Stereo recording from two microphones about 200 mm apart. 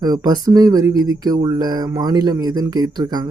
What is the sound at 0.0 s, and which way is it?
Speech, 20° right (ahead or behind).